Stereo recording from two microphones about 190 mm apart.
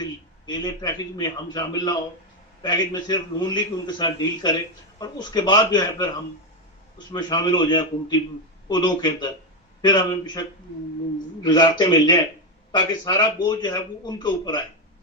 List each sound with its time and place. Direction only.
0.0 s a man's voice: 20° left (ahead or behind)
7.1 s a man's voice: 20° left (ahead or behind)
11.4 s a man's voice: 25° left (ahead or behind)